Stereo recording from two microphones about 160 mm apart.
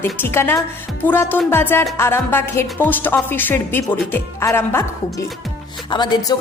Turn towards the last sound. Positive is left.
turn(degrees=25)  # may be behind; listen again after turning